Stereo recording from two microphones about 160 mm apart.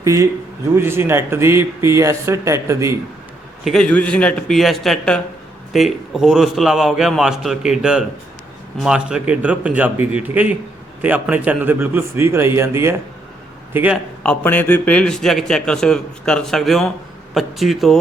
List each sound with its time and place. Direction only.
0.0 s a man's voice: 20° right (ahead or behind)
3.6 s a man's voice: 5° left (ahead or behind)
14.3 s a man's voice: 10° left (ahead or behind)